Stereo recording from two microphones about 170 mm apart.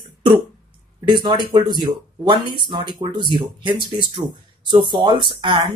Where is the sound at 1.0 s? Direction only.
25° right (ahead or behind).